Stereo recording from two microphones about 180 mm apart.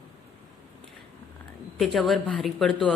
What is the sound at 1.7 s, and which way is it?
A woman's voice, centre (ahead or behind).